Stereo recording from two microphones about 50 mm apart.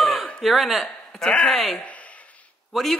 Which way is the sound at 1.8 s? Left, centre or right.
Left.